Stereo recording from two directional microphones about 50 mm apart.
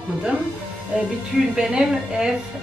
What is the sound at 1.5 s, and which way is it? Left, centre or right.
Speech, centre.